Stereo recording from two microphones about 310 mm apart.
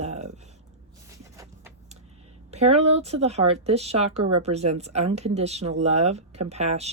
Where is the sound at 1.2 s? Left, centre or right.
Centre.